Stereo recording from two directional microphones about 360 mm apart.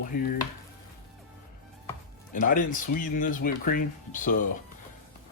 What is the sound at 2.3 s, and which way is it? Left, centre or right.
Speech, left.